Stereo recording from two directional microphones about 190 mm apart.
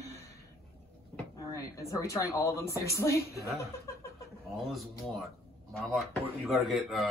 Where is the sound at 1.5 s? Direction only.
15° left (ahead or behind).